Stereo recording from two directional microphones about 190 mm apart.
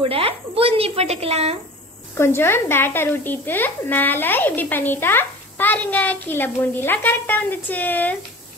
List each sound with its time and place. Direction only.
0.0 s speech: 30° right (ahead or behind)
2.1 s speech: 15° left (ahead or behind)